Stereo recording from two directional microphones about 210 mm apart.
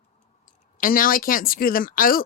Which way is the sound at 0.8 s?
40° left (ahead or behind).